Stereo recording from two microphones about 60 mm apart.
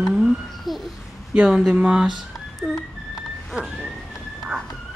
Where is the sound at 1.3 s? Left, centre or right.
Centre.